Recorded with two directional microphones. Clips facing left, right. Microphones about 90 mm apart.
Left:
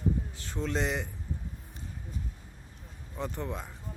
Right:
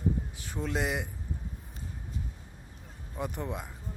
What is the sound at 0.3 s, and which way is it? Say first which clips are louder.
Speech: left 1 dB; 10° right (ahead or behind).